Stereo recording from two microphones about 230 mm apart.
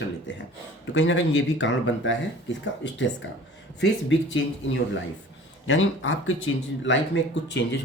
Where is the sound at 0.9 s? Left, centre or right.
Left.